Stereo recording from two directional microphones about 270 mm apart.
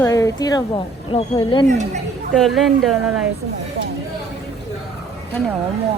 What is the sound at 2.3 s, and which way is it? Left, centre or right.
Speech, centre.